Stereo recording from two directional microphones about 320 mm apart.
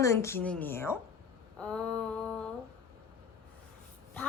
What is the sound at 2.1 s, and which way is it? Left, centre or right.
Speech, centre.